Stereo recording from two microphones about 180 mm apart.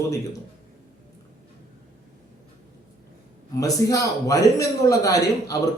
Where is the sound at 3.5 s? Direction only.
20° left (ahead or behind).